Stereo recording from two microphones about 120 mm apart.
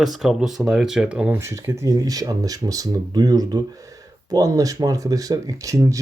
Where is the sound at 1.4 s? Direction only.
25° right (ahead or behind).